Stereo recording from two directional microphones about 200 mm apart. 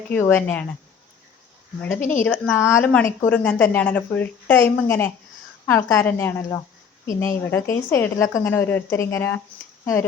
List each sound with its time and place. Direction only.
0.1 s a woman's voice: 10° left (ahead or behind)
2.0 s a woman's voice: 40° left (ahead or behind)
2.2 s a woman's voice: 10° left (ahead or behind)